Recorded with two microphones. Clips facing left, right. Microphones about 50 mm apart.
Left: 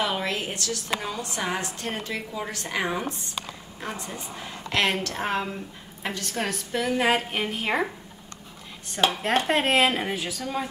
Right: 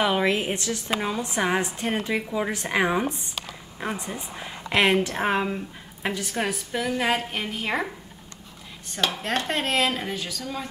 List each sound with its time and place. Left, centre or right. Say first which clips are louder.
0.0 s a woman's voice: right 5 dB; centre
9.1 s a woman's voice: left 3 dB; centre